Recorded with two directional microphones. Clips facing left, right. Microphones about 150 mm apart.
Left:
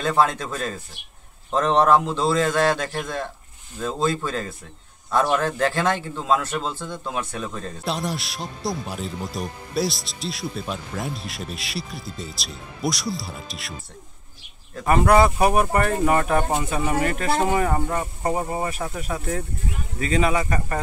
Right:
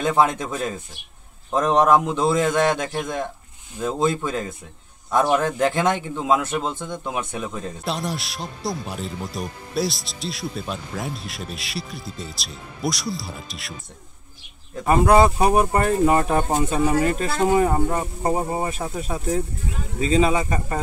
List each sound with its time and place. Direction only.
0.0 s speech: 15° right (ahead or behind)
7.8 s speech: centre (ahead or behind)
14.9 s speech: 20° right (ahead or behind)
17.6 s speech: 15° right (ahead or behind)